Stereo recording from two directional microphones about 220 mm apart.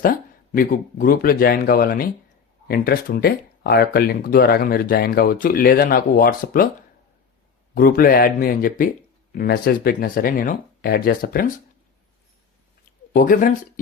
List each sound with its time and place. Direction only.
0.0 s speech: 40° left (ahead or behind)
7.8 s speech: 40° left (ahead or behind)
13.1 s speech: 40° left (ahead or behind)